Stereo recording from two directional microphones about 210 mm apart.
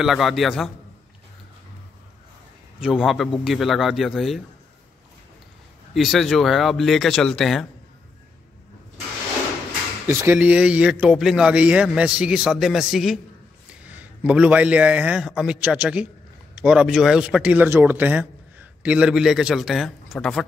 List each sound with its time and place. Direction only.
0.0 s a man's voice: centre (ahead or behind)
2.8 s a man's voice: centre (ahead or behind)
5.9 s a man's voice: centre (ahead or behind)
10.0 s a man's voice: 10° right (ahead or behind)